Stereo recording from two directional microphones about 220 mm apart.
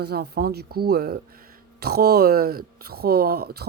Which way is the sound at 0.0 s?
45° right (ahead or behind).